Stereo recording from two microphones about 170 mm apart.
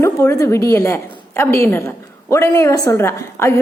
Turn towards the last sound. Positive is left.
turn(degrees=15)  # may be behind; listen again after turning